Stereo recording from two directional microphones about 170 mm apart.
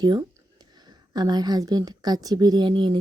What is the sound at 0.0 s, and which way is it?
A woman's voice, 25° right (ahead or behind).